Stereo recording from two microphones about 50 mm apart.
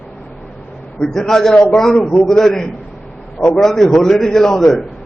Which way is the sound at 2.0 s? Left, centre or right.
Centre.